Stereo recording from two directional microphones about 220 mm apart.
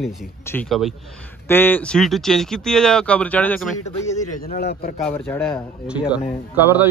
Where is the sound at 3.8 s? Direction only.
30° left (ahead or behind).